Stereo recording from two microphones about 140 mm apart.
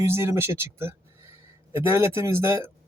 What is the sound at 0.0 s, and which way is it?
Speech, 20° right (ahead or behind).